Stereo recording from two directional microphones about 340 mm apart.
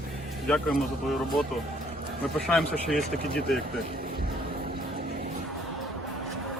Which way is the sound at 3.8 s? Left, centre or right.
Right.